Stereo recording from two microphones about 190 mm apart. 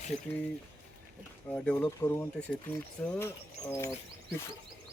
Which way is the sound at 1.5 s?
5° left (ahead or behind).